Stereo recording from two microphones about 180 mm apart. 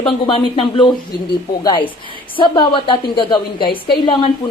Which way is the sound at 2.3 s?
25° left (ahead or behind).